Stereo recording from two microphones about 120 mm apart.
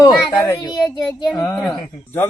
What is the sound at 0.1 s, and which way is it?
Speech, centre (ahead or behind).